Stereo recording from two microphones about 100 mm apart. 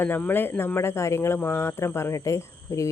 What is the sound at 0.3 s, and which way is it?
Speech, 20° left (ahead or behind).